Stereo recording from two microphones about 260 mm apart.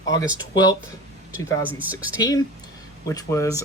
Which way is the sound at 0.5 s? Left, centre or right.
Centre.